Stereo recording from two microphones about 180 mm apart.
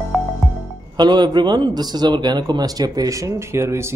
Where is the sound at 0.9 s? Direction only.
25° right (ahead or behind).